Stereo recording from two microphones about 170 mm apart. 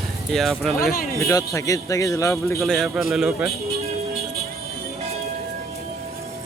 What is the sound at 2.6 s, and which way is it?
Speech, centre (ahead or behind).